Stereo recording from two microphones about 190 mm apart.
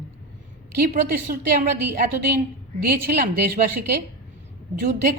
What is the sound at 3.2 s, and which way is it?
Speech, 50° right (ahead or behind).